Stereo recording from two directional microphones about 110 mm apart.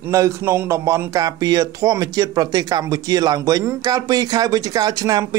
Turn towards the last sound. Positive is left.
turn(degrees=-35)  # may be behind; listen again after turning